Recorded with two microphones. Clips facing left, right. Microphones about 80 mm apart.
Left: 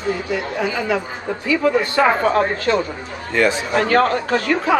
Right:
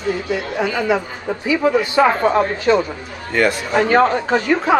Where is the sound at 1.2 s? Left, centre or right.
Centre.